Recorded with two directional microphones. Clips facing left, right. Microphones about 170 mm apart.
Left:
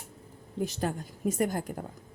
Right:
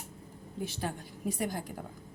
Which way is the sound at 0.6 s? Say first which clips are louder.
Left 5 dB; 45° left (ahead or behind).